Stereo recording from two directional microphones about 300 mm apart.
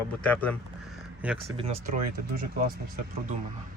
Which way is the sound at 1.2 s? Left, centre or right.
Centre.